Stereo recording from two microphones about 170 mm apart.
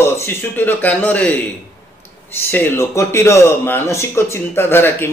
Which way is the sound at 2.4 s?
10° left (ahead or behind).